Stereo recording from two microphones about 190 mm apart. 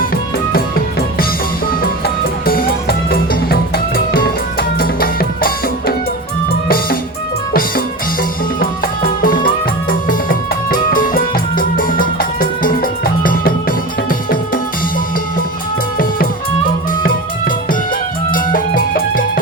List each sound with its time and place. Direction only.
0.5 s music: 50° left (ahead or behind)
2.5 s music: 50° left (ahead or behind)
9.0 s music: 45° left (ahead or behind)
17.0 s music: 50° left (ahead or behind)